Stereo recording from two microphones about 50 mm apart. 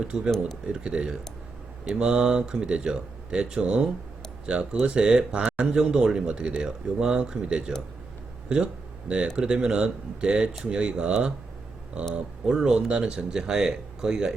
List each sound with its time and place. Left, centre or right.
0.1 s speech: centre